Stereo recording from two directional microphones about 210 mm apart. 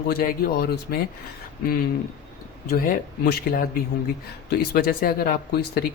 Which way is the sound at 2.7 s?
45° left (ahead or behind).